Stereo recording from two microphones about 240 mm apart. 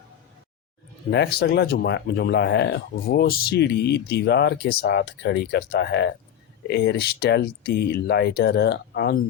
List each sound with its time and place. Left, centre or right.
1.1 s speech: left